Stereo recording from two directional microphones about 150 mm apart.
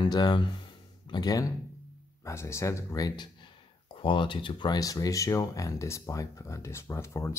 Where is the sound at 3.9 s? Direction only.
35° left (ahead or behind).